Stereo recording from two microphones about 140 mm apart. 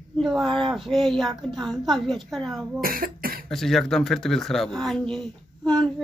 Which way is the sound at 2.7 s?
90° right.